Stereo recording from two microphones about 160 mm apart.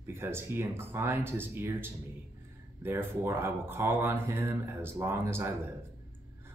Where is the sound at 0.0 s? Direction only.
15° right (ahead or behind).